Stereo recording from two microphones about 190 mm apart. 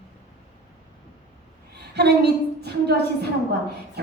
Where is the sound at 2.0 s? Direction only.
60° right (ahead or behind).